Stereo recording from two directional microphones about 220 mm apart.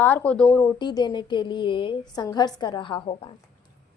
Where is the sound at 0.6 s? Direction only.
20° left (ahead or behind).